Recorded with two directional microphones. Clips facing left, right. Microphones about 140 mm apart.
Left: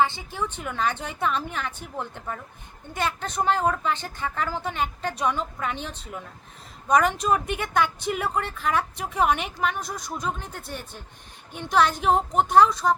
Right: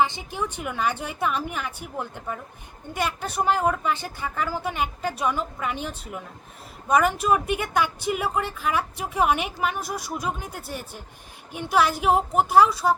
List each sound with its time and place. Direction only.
0.0 s speech: 15° right (ahead or behind)